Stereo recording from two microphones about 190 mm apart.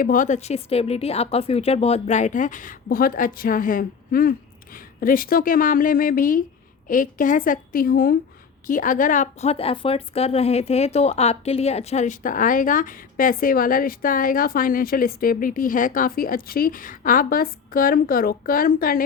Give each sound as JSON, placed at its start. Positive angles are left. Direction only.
{"t": 0.0, "sound": "a woman's voice", "side_deg": 45}